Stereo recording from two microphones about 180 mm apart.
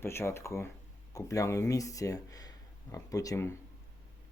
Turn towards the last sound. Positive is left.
turn(degrees=15)  # may be behind; listen again after turning